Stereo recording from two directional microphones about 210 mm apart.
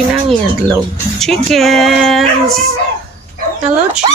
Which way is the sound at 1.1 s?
Centre (ahead or behind).